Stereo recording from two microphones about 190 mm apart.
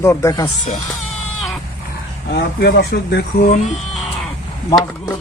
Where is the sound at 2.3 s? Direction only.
55° left (ahead or behind).